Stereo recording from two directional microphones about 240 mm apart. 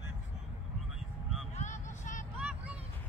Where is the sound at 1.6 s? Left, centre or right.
Left.